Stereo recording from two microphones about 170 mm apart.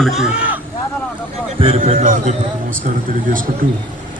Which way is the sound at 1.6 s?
35° right (ahead or behind).